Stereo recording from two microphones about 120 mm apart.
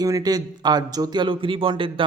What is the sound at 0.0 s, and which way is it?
Speech, 30° right (ahead or behind).